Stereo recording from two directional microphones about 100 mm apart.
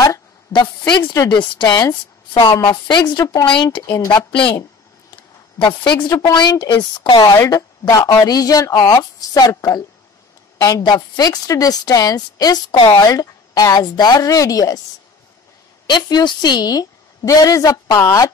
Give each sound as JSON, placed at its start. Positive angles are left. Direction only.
{"t": 0.5, "sound": "a woman's voice", "side_deg": 45}
{"t": 3.8, "sound": "speech", "side_deg": 30}
{"t": 4.3, "sound": "speech", "side_deg": 60}
{"t": 5.6, "sound": "a woman's voice", "side_deg": 50}
{"t": 6.0, "sound": "a woman's voice", "side_deg": 30}
{"t": 6.3, "sound": "a woman's voice", "side_deg": 45}
{"t": 15.9, "sound": "a woman's voice", "side_deg": 45}